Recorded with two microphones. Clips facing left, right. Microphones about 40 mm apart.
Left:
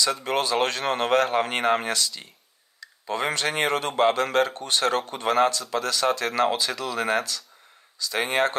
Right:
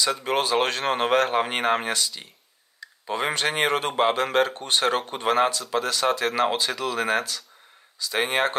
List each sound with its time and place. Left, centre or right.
0.0 s speech: centre